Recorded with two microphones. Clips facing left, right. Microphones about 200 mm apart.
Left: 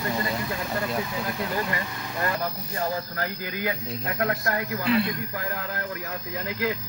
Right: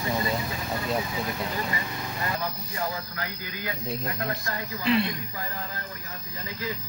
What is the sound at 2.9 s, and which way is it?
Speech, 45° left (ahead or behind).